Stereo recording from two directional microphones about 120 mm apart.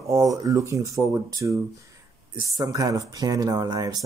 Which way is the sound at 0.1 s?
30° right (ahead or behind).